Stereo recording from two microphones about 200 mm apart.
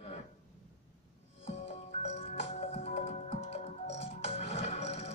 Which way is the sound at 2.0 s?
30° left (ahead or behind).